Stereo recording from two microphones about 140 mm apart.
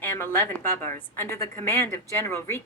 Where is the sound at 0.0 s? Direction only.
15° left (ahead or behind).